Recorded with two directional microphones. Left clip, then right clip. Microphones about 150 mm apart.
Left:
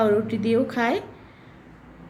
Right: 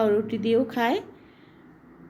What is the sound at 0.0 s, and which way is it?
Speech, 10° right (ahead or behind).